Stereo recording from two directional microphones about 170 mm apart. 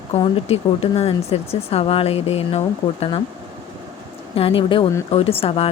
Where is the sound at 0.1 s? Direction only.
35° left (ahead or behind).